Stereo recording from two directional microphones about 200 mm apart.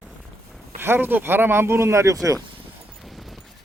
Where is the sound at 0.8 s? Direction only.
10° right (ahead or behind).